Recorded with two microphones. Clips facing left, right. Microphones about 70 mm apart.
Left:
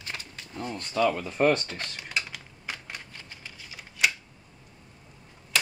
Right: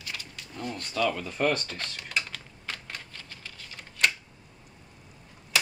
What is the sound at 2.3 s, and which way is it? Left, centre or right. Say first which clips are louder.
Typing: left 1 dB; centre.